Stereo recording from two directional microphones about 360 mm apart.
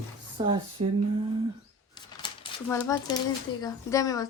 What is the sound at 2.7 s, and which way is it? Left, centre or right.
Speech, centre.